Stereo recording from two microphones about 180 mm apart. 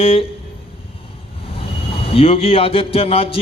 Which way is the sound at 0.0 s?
30° left (ahead or behind).